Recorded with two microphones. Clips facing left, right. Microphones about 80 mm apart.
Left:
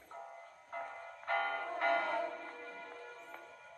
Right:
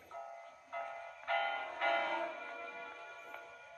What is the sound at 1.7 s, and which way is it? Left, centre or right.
Music, centre.